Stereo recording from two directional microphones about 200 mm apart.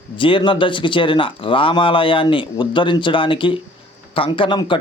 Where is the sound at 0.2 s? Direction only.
25° left (ahead or behind).